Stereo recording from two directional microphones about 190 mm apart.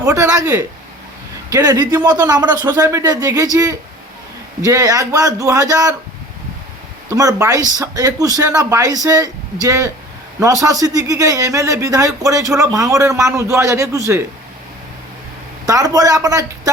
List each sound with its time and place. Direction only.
0.0 s speech: 15° right (ahead or behind)
7.1 s speech: 15° right (ahead or behind)
15.6 s speech: 20° right (ahead or behind)